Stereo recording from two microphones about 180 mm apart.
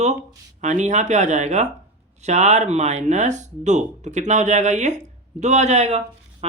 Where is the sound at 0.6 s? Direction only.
40° right (ahead or behind).